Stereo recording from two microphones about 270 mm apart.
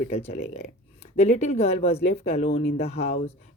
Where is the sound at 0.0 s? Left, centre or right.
Left.